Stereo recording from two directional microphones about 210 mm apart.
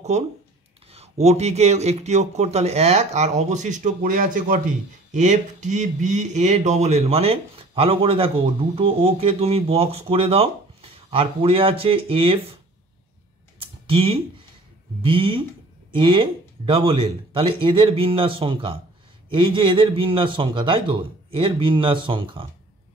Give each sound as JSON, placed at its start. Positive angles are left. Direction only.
{"t": 0.1, "sound": "speech", "side_deg": -35}
{"t": 13.8, "sound": "speech", "side_deg": -25}